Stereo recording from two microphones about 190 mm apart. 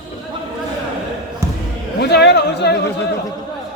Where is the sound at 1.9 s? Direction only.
60° left (ahead or behind).